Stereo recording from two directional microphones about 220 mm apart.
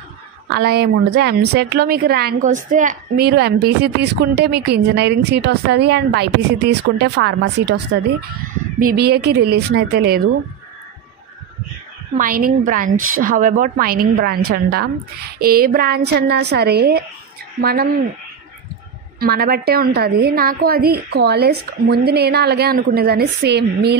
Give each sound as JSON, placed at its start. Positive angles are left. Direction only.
{"t": 0.5, "sound": "a woman's voice", "side_deg": -45}
{"t": 12.2, "sound": "a woman's voice", "side_deg": -40}
{"t": 19.1, "sound": "a woman's voice", "side_deg": -40}